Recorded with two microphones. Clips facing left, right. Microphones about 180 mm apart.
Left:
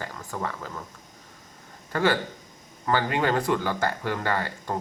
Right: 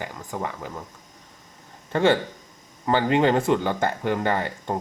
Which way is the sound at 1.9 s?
25° right (ahead or behind).